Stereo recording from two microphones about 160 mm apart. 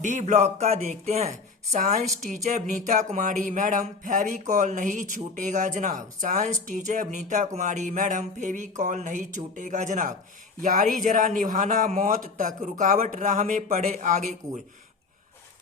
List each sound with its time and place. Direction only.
0.0 s speech: 50° right (ahead or behind)